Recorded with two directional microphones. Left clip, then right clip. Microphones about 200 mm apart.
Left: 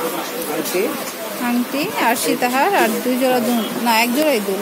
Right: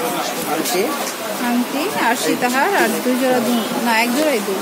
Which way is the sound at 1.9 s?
25° left (ahead or behind).